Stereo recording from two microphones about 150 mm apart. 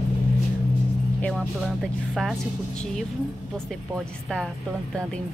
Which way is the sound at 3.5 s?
5° left (ahead or behind).